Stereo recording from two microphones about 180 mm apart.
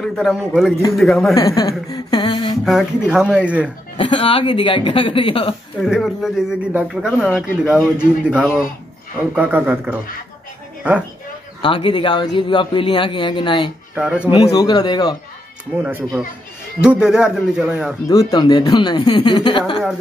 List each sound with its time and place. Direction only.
0.0 s speech: centre (ahead or behind)
1.3 s speech: 20° left (ahead or behind)
2.6 s speech: centre (ahead or behind)
4.0 s speech: 30° left (ahead or behind)
5.8 s speech: centre (ahead or behind)
11.6 s speech: 25° left (ahead or behind)
13.9 s speech: 5° right (ahead or behind)
14.5 s speech: 20° left (ahead or behind)
15.7 s speech: 10° right (ahead or behind)
18.0 s speech: 20° left (ahead or behind)